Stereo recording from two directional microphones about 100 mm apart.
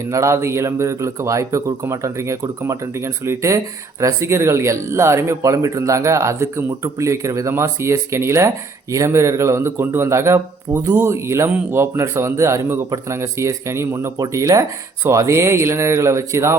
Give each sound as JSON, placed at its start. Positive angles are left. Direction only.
{"t": 0.0, "sound": "speech", "side_deg": -30}